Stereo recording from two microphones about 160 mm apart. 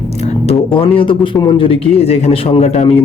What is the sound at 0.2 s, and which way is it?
Speech, 40° left (ahead or behind).